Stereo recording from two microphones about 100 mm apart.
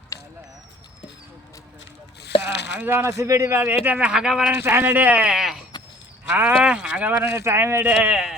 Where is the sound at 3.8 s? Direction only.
15° right (ahead or behind).